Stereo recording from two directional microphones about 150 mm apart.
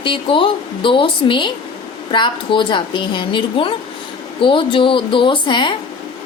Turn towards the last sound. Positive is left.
turn(degrees=30)  # may be behind; listen again after turning